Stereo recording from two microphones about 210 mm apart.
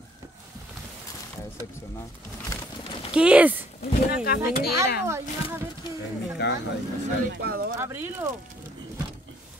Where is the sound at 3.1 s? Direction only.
5° right (ahead or behind).